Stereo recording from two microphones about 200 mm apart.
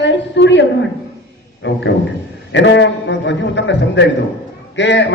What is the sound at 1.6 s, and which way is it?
A man's voice, 65° left (ahead or behind).